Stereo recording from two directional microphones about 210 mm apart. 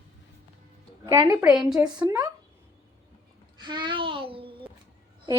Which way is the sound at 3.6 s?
20° right (ahead or behind).